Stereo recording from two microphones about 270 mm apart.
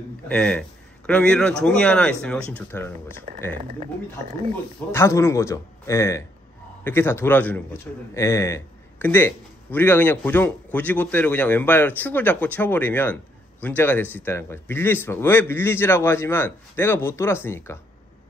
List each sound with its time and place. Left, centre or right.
0.3 s speech: centre
3.5 s speech: right
4.9 s a man's voice: centre